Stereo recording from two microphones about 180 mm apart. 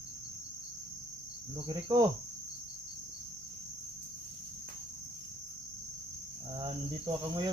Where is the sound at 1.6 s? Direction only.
25° right (ahead or behind).